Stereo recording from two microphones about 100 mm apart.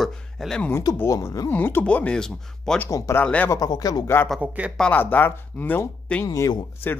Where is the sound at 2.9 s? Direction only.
25° left (ahead or behind).